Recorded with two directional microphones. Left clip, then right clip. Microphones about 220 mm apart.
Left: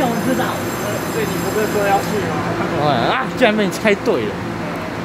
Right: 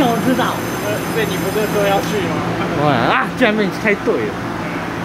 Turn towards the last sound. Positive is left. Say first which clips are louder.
# even
turn(degrees=0)  # may be behind; listen again after turning